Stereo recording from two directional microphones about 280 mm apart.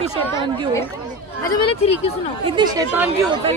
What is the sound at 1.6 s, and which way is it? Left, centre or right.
Speech, centre.